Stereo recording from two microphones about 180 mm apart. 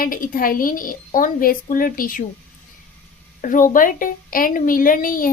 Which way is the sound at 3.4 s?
45° left (ahead or behind).